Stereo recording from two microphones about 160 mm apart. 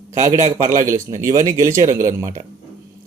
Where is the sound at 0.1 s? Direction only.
20° right (ahead or behind).